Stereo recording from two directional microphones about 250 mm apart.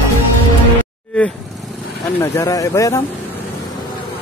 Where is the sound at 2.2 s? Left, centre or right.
Centre.